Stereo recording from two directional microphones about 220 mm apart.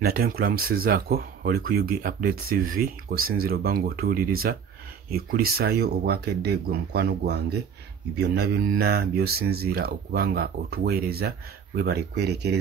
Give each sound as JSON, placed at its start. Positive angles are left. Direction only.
{"t": 0.0, "sound": "speech", "side_deg": -45}